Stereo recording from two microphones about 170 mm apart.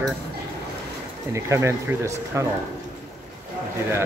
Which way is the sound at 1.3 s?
15° right (ahead or behind).